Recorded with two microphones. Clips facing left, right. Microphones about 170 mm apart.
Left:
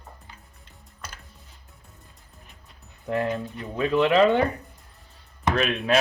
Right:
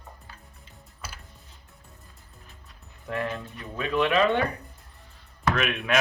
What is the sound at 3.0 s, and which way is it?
Speech, 30° left (ahead or behind).